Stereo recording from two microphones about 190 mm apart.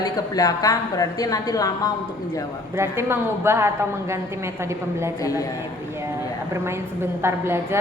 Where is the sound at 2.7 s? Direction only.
15° right (ahead or behind).